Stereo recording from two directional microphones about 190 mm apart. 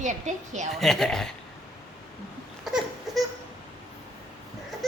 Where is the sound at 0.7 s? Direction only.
Centre (ahead or behind).